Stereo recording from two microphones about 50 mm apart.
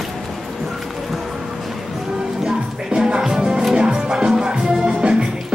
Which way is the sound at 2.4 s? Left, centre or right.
Centre.